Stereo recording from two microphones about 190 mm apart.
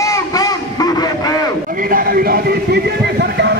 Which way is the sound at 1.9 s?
50° right (ahead or behind).